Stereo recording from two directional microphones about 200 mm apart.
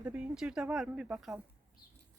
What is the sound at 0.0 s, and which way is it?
Speech, 5° right (ahead or behind).